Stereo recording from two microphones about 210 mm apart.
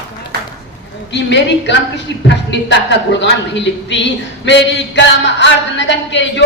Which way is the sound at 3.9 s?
60° left (ahead or behind).